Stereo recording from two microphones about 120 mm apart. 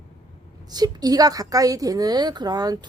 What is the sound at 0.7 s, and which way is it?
A woman's voice, 35° right (ahead or behind).